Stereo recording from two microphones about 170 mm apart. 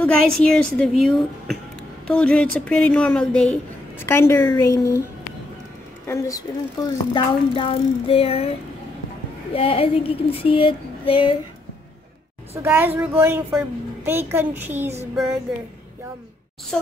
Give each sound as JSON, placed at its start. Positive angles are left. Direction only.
{"t": 0.0, "sound": "a woman's voice", "side_deg": 5}
{"t": 6.0, "sound": "a woman's voice", "side_deg": 15}
{"t": 6.8, "sound": "a sound", "side_deg": 30}
{"t": 12.6, "sound": "a woman's voice", "side_deg": -10}
{"t": 16.7, "sound": "a woman's voice", "side_deg": 5}